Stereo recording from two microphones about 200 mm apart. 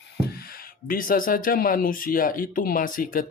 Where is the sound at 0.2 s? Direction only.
50° left (ahead or behind).